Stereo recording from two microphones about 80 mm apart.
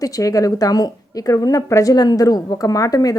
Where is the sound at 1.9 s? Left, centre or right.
Left.